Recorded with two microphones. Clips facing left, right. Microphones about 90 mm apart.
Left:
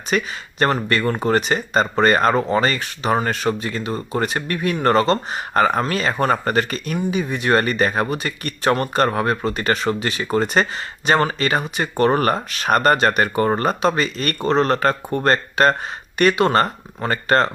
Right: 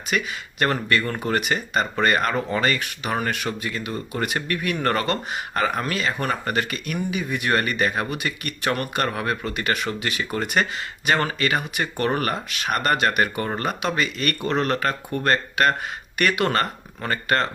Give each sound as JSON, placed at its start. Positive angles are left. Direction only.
{"t": 0.1, "sound": "speech", "side_deg": 35}